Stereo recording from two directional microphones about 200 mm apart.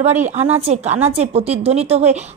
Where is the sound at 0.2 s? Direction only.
35° right (ahead or behind).